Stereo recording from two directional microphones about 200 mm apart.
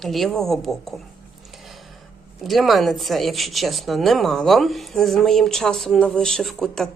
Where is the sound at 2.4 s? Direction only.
Centre (ahead or behind).